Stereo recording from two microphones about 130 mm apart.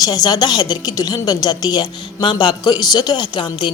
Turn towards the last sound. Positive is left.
turn(degrees=35)  # may be behind; listen again after turning